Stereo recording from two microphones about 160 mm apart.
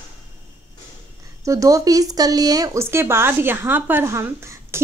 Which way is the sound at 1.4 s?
20° right (ahead or behind).